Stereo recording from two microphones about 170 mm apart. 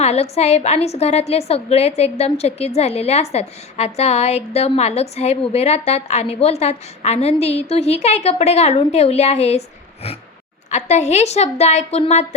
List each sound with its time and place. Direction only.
0.0 s a woman's voice: 40° left (ahead or behind)